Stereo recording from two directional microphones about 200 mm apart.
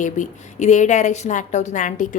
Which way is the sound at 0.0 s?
35° left (ahead or behind).